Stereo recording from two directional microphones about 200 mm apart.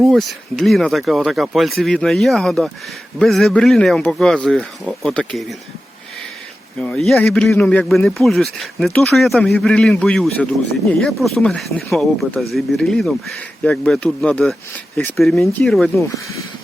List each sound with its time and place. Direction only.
0.0 s speech: centre (ahead or behind)
6.7 s speech: 5° left (ahead or behind)
16.0 s speech: 15° left (ahead or behind)